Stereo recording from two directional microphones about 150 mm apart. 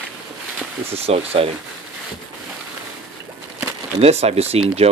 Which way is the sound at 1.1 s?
40° right (ahead or behind).